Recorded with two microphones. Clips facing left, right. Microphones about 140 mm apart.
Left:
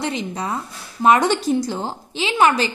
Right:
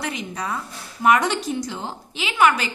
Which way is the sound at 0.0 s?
30° left (ahead or behind).